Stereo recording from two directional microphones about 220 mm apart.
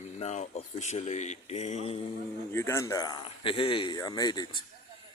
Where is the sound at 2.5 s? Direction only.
10° left (ahead or behind).